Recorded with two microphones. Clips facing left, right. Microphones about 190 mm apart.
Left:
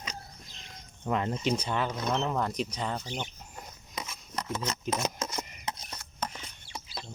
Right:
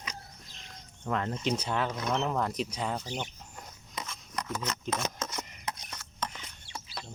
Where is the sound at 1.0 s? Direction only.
15° left (ahead or behind).